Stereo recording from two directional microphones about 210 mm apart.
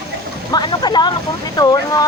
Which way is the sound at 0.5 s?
20° left (ahead or behind).